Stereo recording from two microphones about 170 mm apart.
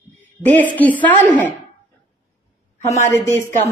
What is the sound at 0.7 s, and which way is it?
Speech, 10° left (ahead or behind).